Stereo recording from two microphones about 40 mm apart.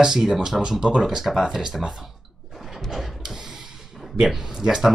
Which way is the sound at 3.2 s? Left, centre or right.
Centre.